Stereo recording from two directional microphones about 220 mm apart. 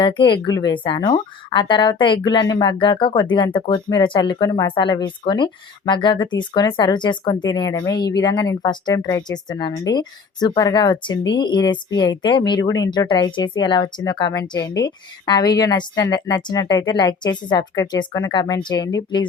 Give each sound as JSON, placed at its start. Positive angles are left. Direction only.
{"t": 0.0, "sound": "a woman's voice", "side_deg": 20}